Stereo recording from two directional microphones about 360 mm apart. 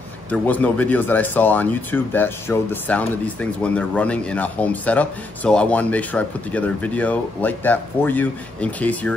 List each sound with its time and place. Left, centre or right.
0.3 s speech: centre